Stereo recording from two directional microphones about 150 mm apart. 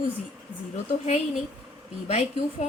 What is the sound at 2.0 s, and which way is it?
Speech, 45° left (ahead or behind).